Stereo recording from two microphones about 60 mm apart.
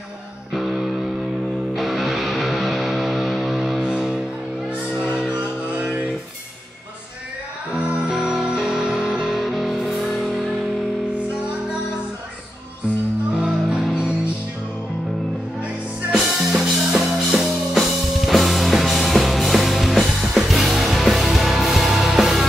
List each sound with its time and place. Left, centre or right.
0.5 s music: centre
7.7 s music: centre
8.1 s music: centre
13.4 s music: centre
16.1 s music: centre